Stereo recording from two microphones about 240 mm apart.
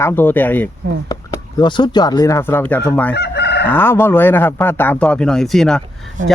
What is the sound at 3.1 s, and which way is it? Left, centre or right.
Chicken, left.